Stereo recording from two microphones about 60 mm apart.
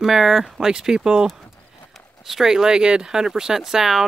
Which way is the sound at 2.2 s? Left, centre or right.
Centre.